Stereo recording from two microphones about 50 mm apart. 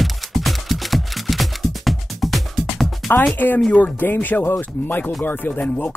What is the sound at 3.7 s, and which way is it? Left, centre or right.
Speech, left.